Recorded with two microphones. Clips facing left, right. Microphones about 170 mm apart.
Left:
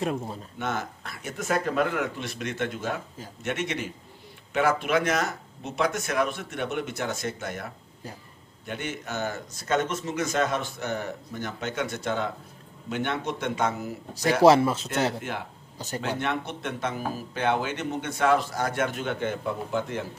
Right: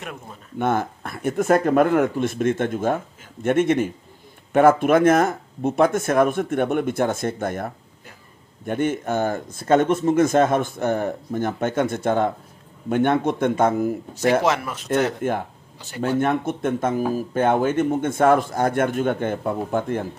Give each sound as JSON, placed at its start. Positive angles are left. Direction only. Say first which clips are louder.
{"t": 0.0, "sound": "speech", "louder": "left 7 dB", "side_deg": 30}
{"t": 0.6, "sound": "speech", "louder": "right 10 dB", "side_deg": -55}
{"t": 14.4, "sound": "speech", "louder": "left 5 dB", "side_deg": 30}
{"t": 15.2, "sound": "speech", "louder": "right 10 dB", "side_deg": -50}